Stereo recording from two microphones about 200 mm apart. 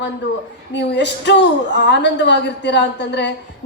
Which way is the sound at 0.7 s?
60° left (ahead or behind).